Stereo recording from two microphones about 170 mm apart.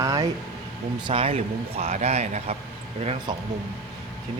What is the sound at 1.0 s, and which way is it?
Speech, 35° right (ahead or behind).